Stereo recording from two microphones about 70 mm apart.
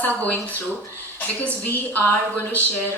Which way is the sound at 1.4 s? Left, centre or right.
Left.